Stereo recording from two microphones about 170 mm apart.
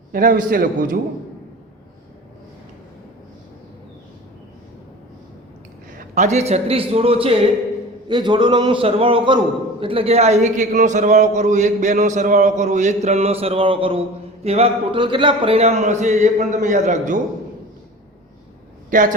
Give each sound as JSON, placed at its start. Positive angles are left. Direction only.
{"t": 0.1, "sound": "a man's voice", "side_deg": -55}
{"t": 6.0, "sound": "a man's voice", "side_deg": -45}
{"t": 18.9, "sound": "a man's voice", "side_deg": -50}